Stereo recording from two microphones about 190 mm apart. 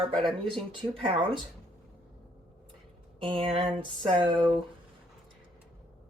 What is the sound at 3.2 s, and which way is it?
Speech, 30° right (ahead or behind).